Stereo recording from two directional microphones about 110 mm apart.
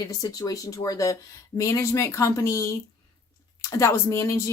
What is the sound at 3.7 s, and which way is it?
Speech, 25° left (ahead or behind).